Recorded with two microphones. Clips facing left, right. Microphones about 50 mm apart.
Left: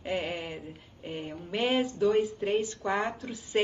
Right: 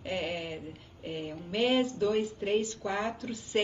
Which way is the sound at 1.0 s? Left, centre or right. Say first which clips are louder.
Even; centre.